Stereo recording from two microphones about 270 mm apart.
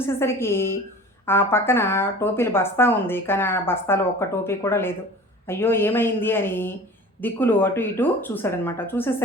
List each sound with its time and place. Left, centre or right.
0.0 s a woman's voice: centre